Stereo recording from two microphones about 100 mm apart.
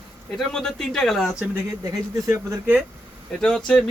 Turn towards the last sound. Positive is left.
turn(degrees=10)  # may be behind; listen again after turning